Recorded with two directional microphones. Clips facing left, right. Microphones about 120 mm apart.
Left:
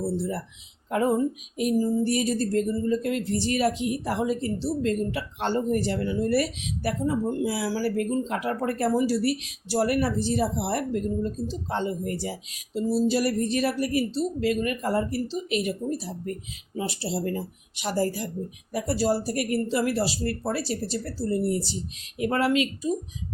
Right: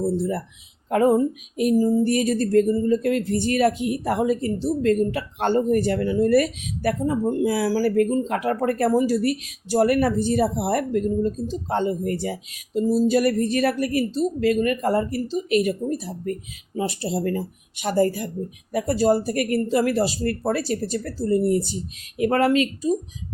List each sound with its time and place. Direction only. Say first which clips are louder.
0.2 s speech: right 5 dB; 50° right (ahead or behind)